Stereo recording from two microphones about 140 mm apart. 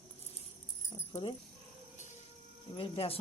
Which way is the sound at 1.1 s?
35° left (ahead or behind).